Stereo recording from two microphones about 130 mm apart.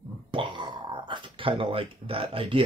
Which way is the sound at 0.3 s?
40° right (ahead or behind).